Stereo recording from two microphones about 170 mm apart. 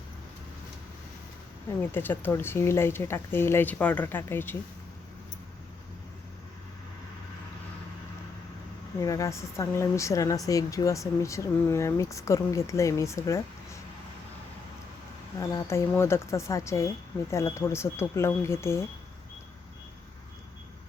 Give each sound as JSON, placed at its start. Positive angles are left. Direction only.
{"t": 1.8, "sound": "speech", "side_deg": 15}
{"t": 9.0, "sound": "speech", "side_deg": 20}
{"t": 15.4, "sound": "speech", "side_deg": 15}